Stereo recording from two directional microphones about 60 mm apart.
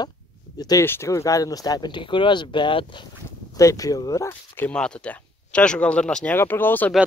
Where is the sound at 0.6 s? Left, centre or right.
Left.